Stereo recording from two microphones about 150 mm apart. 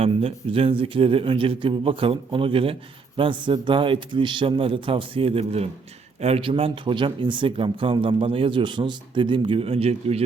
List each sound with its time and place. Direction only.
0.0 s speech: 40° right (ahead or behind)